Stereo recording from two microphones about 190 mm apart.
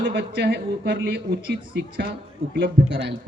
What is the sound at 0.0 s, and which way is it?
A man's voice, 60° right (ahead or behind).